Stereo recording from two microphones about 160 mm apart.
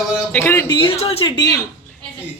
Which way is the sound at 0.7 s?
30° left (ahead or behind).